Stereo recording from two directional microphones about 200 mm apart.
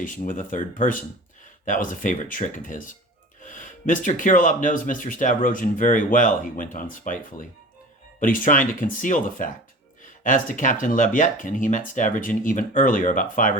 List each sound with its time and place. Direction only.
0.0 s speech: 40° left (ahead or behind)